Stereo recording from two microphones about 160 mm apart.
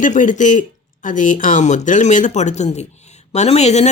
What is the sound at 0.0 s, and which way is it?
Speech, 55° left (ahead or behind).